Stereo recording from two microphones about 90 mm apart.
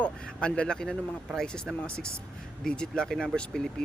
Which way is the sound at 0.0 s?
10° left (ahead or behind).